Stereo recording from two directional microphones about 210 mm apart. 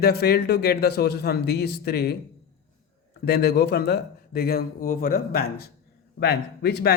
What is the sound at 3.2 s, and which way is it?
A man's voice, 50° left (ahead or behind).